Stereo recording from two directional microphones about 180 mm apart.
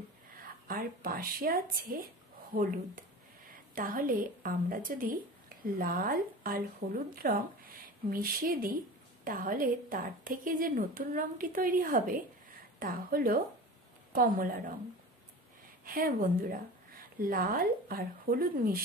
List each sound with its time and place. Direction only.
0.4 s a woman's voice: 50° right (ahead or behind)
15.8 s speech: 50° right (ahead or behind)